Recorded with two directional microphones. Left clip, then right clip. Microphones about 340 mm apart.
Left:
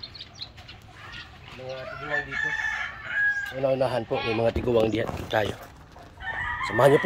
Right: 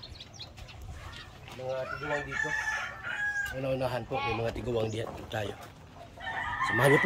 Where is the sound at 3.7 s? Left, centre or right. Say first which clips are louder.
Left 7 dB; left.